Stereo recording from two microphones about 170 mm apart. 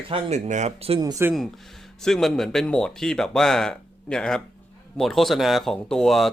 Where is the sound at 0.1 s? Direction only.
40° right (ahead or behind).